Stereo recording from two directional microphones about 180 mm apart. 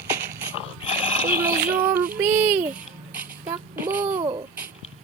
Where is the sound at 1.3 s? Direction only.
10° right (ahead or behind).